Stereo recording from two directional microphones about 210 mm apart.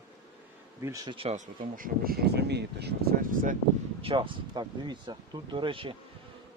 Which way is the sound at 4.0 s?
25° right (ahead or behind).